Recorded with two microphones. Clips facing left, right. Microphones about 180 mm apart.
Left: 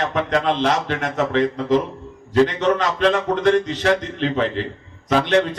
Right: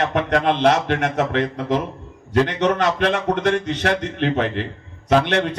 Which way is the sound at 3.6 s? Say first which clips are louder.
Left 2 dB; 55° right (ahead or behind).